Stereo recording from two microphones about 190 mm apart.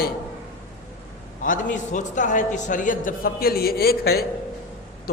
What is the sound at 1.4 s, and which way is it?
A man's voice, 45° left (ahead or behind).